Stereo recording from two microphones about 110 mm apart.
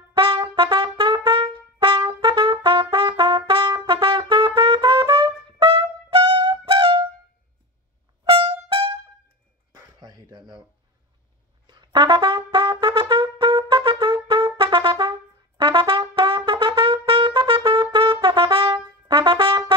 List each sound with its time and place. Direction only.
0.3 s trumpet: 40° right (ahead or behind)
6.3 s music: 50° right (ahead or behind)
8.3 s music: 50° right (ahead or behind)
9.7 s a sound: 35° right (ahead or behind)
11.6 s trumpet: 45° right (ahead or behind)